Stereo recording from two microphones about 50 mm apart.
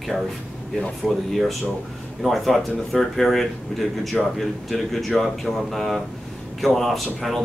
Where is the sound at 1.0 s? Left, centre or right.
Centre.